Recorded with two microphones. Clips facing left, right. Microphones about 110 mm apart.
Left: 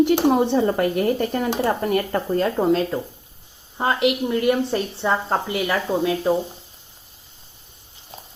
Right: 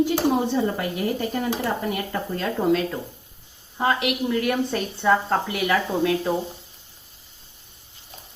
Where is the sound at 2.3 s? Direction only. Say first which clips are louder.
Left 3 dB; 35° left (ahead or behind).